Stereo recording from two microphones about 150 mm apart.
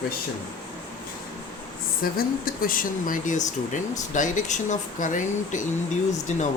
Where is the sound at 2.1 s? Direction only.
70° left (ahead or behind).